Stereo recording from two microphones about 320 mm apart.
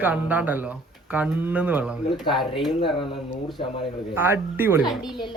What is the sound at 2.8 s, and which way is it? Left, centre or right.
Speech, centre.